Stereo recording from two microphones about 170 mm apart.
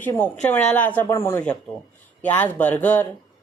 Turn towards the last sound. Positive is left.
turn(degrees=10)  # may be behind; listen again after turning